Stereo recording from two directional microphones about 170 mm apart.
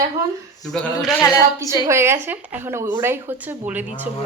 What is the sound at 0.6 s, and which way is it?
Speech, centre (ahead or behind).